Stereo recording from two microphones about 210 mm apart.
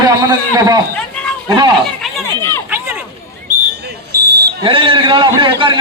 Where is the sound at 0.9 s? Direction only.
5° left (ahead or behind).